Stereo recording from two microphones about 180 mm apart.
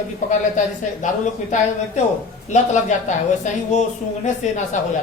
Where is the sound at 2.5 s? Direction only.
40° left (ahead or behind).